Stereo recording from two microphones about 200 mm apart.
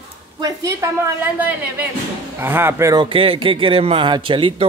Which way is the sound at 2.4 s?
10° right (ahead or behind).